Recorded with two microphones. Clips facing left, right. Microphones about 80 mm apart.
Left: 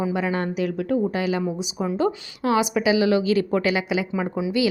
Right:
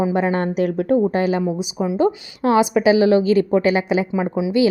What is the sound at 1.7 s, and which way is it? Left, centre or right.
Speech, centre.